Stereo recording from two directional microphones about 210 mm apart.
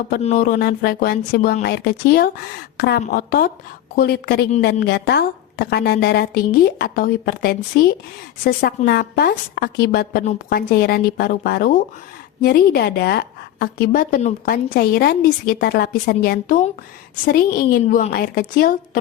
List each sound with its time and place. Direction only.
0.2 s a woman's voice: 35° left (ahead or behind)